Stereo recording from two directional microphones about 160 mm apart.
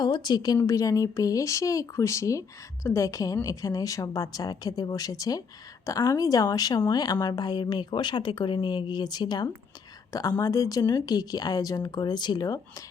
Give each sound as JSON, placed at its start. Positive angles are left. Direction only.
{"t": 0.0, "sound": "a woman's voice", "side_deg": 25}